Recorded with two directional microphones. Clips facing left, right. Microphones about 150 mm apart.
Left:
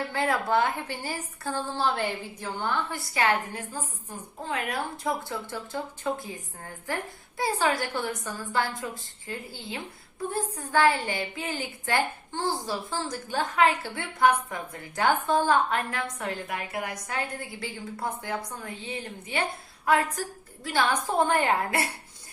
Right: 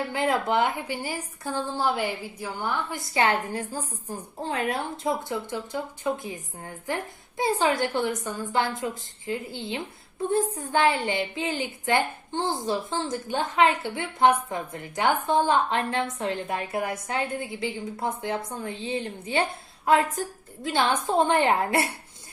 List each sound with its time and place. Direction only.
0.1 s a woman's voice: 20° right (ahead or behind)
5.3 s a woman's voice: 15° right (ahead or behind)